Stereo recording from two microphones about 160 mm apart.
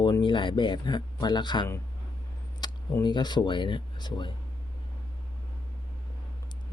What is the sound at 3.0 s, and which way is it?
Speech, 25° left (ahead or behind).